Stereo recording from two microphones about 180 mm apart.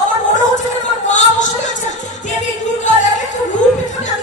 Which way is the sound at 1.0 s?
45° left (ahead or behind).